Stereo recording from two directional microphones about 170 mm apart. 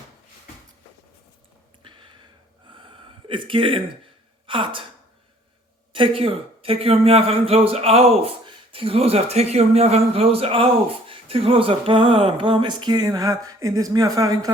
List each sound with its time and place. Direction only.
1.8 s a sound: 30° right (ahead or behind)
4.4 s a woman's voice: 30° right (ahead or behind)
5.9 s a man's voice: 30° right (ahead or behind)